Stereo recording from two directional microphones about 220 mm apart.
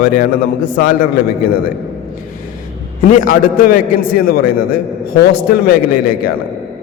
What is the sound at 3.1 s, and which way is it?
A man's voice, 40° left (ahead or behind).